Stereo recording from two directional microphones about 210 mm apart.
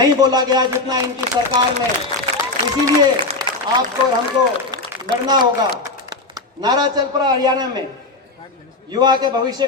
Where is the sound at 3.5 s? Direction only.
20° right (ahead or behind).